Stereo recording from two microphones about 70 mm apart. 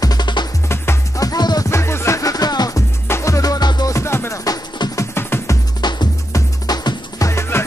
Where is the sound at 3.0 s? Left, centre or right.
Left.